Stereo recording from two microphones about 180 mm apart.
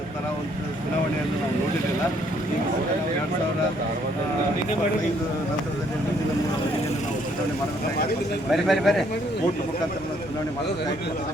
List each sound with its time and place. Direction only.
8.4 s a man's voice: centre (ahead or behind)